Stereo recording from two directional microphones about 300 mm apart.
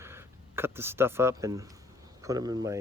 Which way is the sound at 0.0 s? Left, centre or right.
Centre.